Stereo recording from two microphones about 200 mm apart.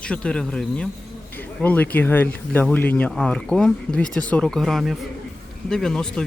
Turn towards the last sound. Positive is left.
turn(degrees=5)  # may be behind; listen again after turning